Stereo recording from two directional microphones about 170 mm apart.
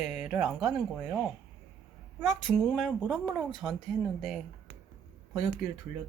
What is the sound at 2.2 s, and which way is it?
A woman's voice, 5° left (ahead or behind).